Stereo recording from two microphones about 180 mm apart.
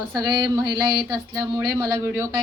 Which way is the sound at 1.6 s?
15° right (ahead or behind).